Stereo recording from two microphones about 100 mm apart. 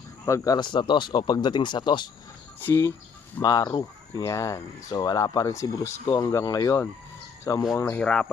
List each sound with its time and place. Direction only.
0.3 s speech: 35° left (ahead or behind); by 2.0 s 50° left (ahead or behind)
2.6 s speech: 20° left (ahead or behind)
3.4 s speech: 35° left (ahead or behind)
7.9 s speech: 10° left (ahead or behind)